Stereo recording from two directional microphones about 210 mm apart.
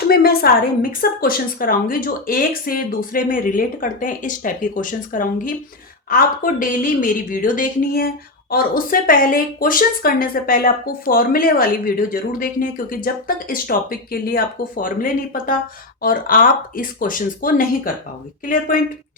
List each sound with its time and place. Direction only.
0.1 s a woman's voice: 45° left (ahead or behind)